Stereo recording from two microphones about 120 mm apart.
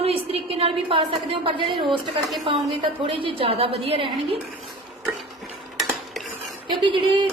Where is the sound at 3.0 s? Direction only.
45° right (ahead or behind).